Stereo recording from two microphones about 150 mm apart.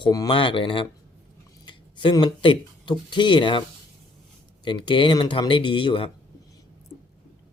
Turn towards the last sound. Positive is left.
turn(degrees=35)  # may be behind; listen again after turning